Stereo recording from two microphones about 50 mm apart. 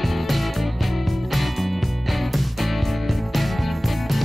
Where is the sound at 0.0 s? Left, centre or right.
Centre.